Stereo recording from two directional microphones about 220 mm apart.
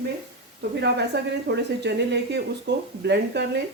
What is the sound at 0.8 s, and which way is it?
Speech, 50° right (ahead or behind).